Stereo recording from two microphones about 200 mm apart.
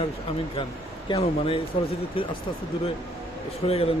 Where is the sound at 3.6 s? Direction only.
30° left (ahead or behind).